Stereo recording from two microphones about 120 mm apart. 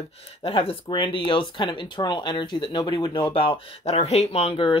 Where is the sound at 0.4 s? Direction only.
55° left (ahead or behind).